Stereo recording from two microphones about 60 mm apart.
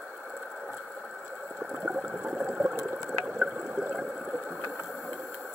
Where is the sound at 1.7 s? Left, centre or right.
Centre.